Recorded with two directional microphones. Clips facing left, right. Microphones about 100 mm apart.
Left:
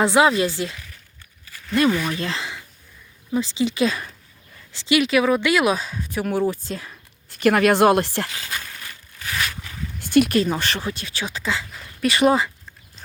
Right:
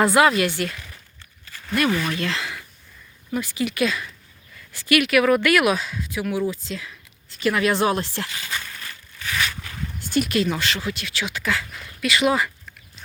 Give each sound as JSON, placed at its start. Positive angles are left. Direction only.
{"t": 0.0, "sound": "speech", "side_deg": 25}
{"t": 1.9, "sound": "speech", "side_deg": 15}
{"t": 2.1, "sound": "speech", "side_deg": 30}
{"t": 7.3, "sound": "speech", "side_deg": 55}
{"t": 8.4, "sound": "a sound", "side_deg": 5}
{"t": 9.1, "sound": "a sound", "side_deg": 30}
{"t": 10.3, "sound": "speech", "side_deg": 35}